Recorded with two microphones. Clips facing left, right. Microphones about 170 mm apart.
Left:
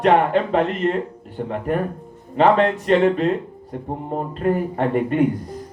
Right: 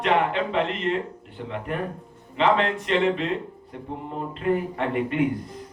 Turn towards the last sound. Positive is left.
turn(degrees=45)  # may be behind; listen again after turning